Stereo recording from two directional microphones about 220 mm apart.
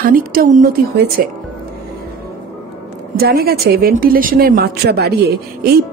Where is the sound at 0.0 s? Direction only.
40° right (ahead or behind).